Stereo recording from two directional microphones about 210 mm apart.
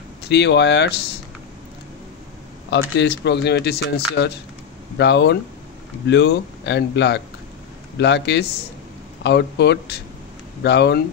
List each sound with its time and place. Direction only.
0.3 s a man's voice: 55° left (ahead or behind)
2.7 s a man's voice: 55° left (ahead or behind)